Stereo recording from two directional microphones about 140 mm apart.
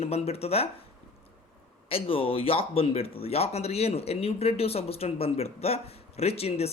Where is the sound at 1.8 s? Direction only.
40° left (ahead or behind).